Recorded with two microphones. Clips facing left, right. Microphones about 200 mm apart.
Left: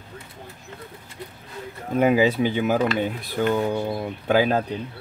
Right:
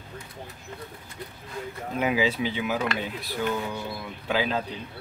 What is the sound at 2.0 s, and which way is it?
Speech, 50° left (ahead or behind).